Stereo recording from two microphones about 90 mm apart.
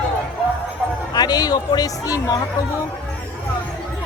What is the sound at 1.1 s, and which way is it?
Speech, 50° left (ahead or behind).